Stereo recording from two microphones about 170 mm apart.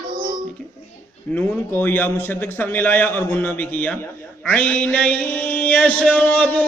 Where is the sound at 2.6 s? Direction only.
10° left (ahead or behind).